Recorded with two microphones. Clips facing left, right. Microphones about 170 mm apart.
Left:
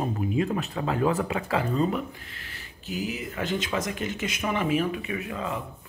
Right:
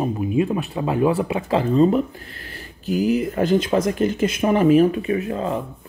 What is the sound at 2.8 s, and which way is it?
Speech, 45° right (ahead or behind).